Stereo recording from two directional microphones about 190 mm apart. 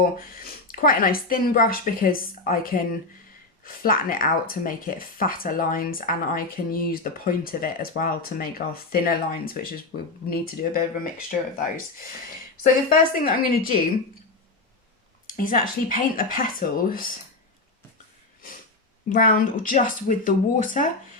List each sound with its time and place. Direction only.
0.2 s speech: 50° left (ahead or behind)
12.6 s speech: 50° left (ahead or behind)
15.4 s speech: 45° left (ahead or behind)
19.0 s speech: 45° left (ahead or behind)